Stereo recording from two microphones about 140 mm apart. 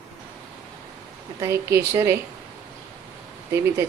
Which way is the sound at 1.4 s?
20° right (ahead or behind).